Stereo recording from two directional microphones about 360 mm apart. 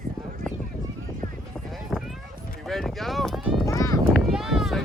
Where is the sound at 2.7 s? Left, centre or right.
Centre.